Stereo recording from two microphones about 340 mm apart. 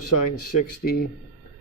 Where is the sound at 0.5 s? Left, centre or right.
Left.